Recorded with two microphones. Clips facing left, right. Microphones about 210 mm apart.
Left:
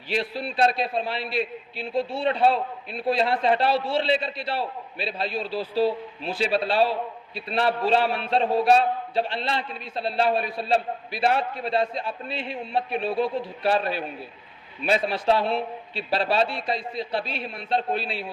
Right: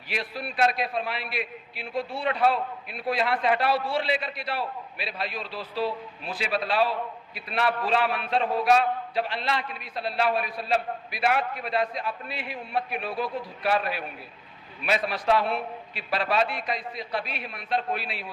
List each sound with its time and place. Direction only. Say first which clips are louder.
0.1 s a man's voice: left 5 dB; 25° left (ahead or behind)